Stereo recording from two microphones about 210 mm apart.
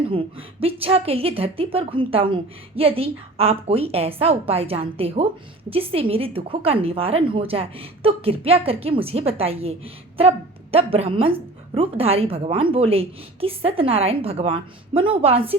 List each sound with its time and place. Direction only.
0.1 s a woman's voice: 25° right (ahead or behind)